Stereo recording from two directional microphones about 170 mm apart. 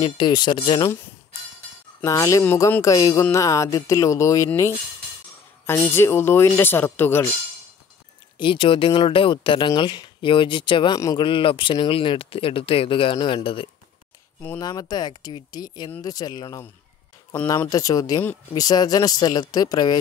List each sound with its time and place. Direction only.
0.0 s speech: 25° left (ahead or behind)
2.0 s speech: 20° left (ahead or behind)
8.4 s speech: 30° left (ahead or behind)